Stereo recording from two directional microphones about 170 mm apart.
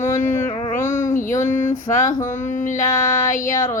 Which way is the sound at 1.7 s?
50° left (ahead or behind).